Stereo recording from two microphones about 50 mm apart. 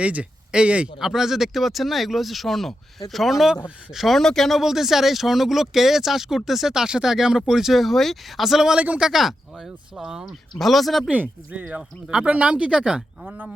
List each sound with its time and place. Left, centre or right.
0.0 s speech: right
0.9 s speech: centre
4.1 s speech: centre
4.6 s speech: centre
10.6 s speech: centre
11.1 s speech: right
11.8 s speech: centre